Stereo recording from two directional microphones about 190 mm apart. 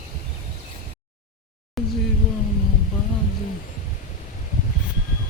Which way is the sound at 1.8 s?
Centre (ahead or behind).